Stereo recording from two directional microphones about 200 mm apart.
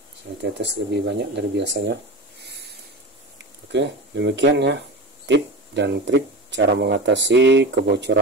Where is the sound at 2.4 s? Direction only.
55° right (ahead or behind).